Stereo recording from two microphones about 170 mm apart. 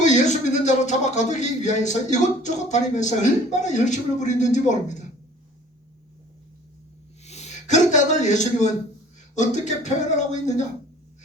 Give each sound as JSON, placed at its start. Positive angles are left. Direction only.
{"t": 0.0, "sound": "speech", "side_deg": 45}
{"t": 7.3, "sound": "speech", "side_deg": 40}